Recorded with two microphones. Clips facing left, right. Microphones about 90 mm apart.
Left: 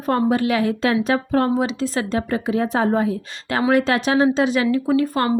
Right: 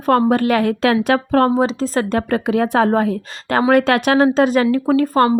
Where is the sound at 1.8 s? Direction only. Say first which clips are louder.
Right 4 dB; 45° right (ahead or behind); by 3.1 s 65° right (ahead or behind).